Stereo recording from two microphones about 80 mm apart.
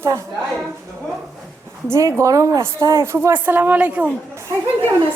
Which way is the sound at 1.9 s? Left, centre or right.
Right.